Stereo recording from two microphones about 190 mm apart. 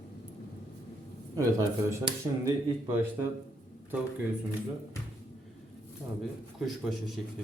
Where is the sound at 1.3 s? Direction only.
20° right (ahead or behind).